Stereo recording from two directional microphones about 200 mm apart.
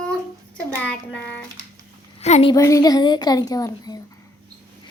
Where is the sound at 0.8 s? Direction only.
5° left (ahead or behind).